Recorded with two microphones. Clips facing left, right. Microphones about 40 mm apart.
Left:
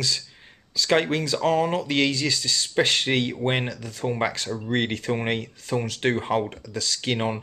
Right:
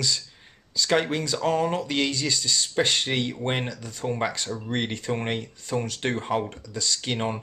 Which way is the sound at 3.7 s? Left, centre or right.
Centre.